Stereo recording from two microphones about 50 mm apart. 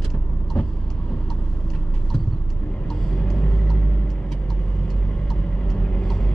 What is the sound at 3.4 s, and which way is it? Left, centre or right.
Vehicle, left.